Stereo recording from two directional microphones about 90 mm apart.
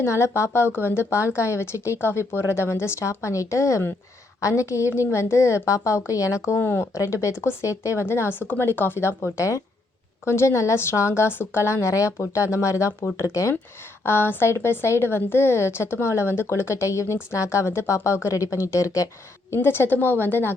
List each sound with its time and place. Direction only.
0.0 s a woman's voice: 30° left (ahead or behind)
7.0 s a woman's voice: 35° left (ahead or behind)